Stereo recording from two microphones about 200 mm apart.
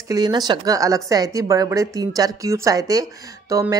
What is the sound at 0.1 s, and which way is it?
A woman's voice, 20° right (ahead or behind).